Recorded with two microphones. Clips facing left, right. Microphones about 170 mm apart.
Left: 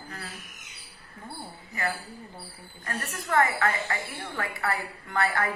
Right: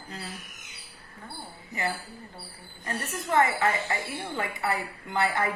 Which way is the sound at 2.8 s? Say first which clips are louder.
Right 2 dB; 20° right (ahead or behind).